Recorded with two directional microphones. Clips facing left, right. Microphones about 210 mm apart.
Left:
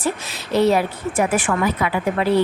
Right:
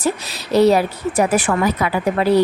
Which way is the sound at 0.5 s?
40° right (ahead or behind).